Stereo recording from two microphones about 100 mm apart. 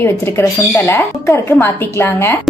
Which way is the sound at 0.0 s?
25° left (ahead or behind).